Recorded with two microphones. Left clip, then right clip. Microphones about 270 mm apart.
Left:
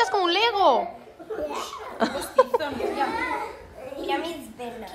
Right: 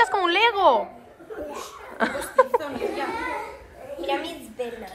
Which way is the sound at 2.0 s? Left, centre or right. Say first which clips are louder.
Right 1 dB; centre.